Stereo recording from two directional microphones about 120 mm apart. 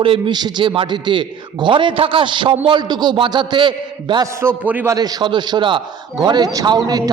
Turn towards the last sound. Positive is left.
turn(degrees=-35)  # may be behind; listen again after turning